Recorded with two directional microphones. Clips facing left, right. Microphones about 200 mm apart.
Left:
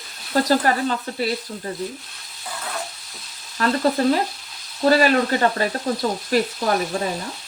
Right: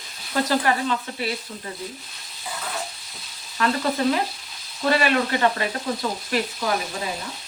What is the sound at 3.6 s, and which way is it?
Speech, 40° left (ahead or behind).